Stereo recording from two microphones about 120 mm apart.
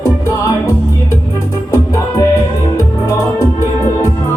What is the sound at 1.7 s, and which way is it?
Music, 25° left (ahead or behind).